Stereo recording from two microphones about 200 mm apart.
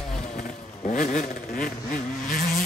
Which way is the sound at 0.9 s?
40° left (ahead or behind).